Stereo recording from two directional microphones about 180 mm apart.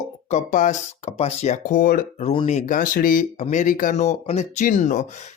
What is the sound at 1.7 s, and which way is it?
Speech, 50° left (ahead or behind).